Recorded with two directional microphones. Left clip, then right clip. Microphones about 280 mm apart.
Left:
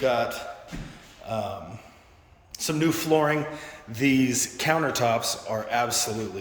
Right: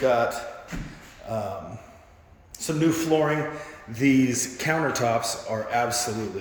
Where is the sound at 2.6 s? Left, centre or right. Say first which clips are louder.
Right 1 dB; centre.